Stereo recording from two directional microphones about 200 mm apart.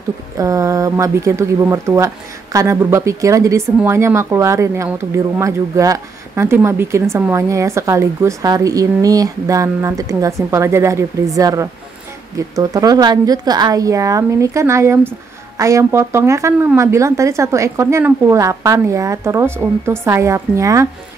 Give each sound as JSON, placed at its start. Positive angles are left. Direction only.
{"t": 0.4, "sound": "speech", "side_deg": -15}